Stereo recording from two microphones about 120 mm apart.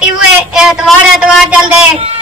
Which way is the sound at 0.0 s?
5° right (ahead or behind).